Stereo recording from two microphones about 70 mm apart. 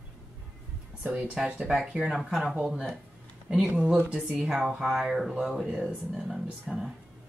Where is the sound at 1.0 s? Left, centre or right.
Right.